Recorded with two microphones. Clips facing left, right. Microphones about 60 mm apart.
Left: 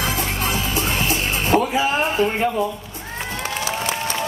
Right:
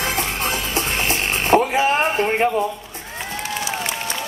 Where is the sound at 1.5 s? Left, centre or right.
Right.